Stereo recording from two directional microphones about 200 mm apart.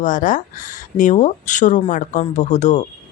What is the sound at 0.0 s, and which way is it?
A man's voice, 40° left (ahead or behind).